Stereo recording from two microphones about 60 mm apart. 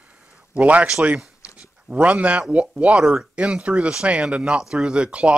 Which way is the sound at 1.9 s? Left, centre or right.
Right.